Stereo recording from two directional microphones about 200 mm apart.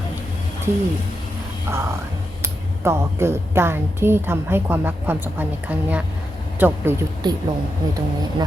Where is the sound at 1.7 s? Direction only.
15° right (ahead or behind).